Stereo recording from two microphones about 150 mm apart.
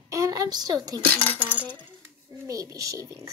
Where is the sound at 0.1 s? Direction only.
25° right (ahead or behind).